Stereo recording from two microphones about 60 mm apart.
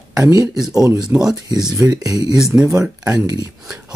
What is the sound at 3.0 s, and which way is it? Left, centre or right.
Speech, right.